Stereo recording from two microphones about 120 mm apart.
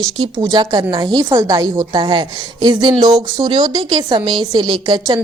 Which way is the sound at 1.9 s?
45° right (ahead or behind).